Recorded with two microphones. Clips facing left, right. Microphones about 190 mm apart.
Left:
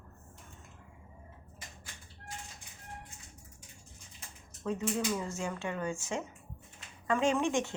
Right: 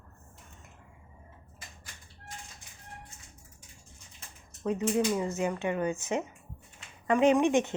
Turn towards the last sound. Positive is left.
turn(degrees=-20)  # may be behind; listen again after turning